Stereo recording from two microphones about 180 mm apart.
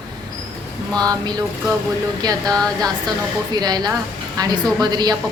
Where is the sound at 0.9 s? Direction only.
20° right (ahead or behind).